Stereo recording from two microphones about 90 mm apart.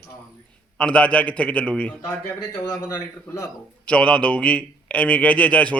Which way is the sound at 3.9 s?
10° left (ahead or behind).